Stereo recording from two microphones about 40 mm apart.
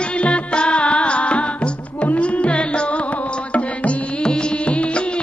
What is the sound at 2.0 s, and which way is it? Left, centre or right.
Carnatic music, left.